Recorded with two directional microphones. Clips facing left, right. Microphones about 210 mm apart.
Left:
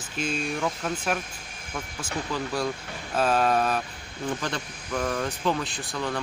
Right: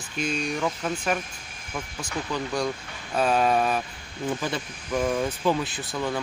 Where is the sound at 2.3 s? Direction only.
5° left (ahead or behind).